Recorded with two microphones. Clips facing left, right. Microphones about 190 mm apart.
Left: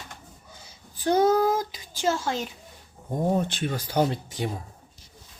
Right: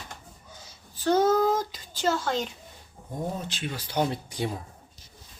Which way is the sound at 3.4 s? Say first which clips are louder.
Left 5 dB; 50° left (ahead or behind).